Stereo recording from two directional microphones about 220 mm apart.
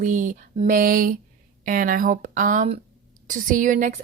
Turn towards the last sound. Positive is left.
turn(degrees=-35)  # may be behind; listen again after turning